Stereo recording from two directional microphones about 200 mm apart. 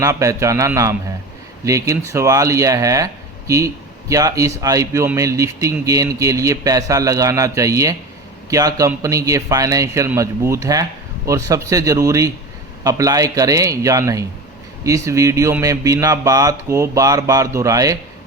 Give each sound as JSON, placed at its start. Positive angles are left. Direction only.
{"t": 0.0, "sound": "speech", "side_deg": -15}